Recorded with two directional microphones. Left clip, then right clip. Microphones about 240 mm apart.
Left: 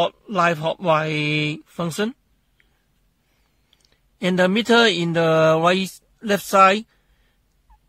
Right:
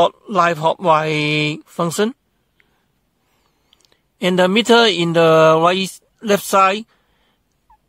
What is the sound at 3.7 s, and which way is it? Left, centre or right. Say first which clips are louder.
Speech: right 5 dB; right.